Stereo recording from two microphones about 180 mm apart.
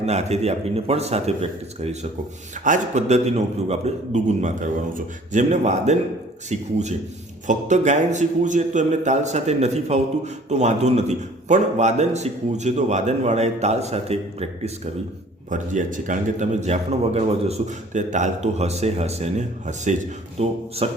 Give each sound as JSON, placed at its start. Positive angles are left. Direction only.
{"t": 0.0, "sound": "a man's voice", "side_deg": -35}